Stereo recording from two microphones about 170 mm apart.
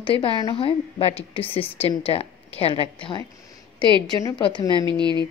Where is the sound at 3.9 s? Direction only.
25° right (ahead or behind).